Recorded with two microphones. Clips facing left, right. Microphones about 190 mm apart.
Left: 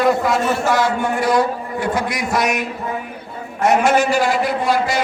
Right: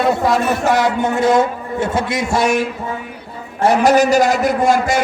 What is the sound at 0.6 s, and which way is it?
A man's voice, 20° right (ahead or behind).